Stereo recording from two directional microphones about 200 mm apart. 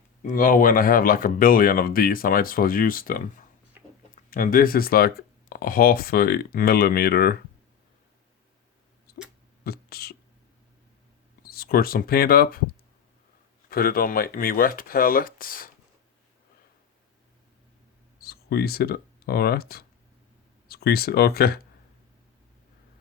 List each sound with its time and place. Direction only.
0.3 s speech: 45° left (ahead or behind)
3.8 s a sound: 10° right (ahead or behind)
4.1 s speech: 45° left (ahead or behind)
9.6 s speech: 50° left (ahead or behind)
11.4 s speech: 50° left (ahead or behind)
13.7 s speech: 50° left (ahead or behind)
18.2 s speech: 50° left (ahead or behind)